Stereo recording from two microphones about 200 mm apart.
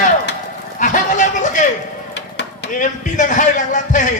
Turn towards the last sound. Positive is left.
turn(degrees=40)  # may be behind; listen again after turning